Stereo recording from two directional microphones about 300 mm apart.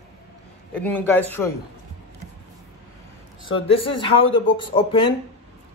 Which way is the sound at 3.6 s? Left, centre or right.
Centre.